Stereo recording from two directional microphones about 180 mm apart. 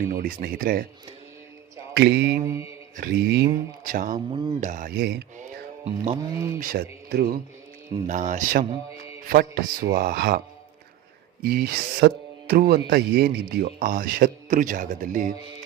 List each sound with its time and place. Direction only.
0.1 s speech: 50° right (ahead or behind)
1.9 s mantra: 70° right (ahead or behind)
2.9 s speech: 55° right (ahead or behind)
4.3 s speech: 25° right (ahead or behind)
4.6 s a man's voice: 45° right (ahead or behind); by 5.2 s 65° right (ahead or behind)
5.4 s music: 40° right (ahead or behind)
6.6 s a man's voice: 55° right (ahead or behind)
8.0 s speech: 45° right (ahead or behind)
9.3 s a man's voice: 55° right (ahead or behind)
11.4 s speech: 60° right (ahead or behind)